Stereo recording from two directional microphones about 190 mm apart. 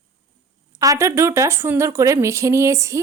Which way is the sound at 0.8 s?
15° right (ahead or behind).